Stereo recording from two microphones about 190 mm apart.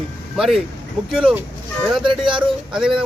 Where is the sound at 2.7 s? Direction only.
5° right (ahead or behind).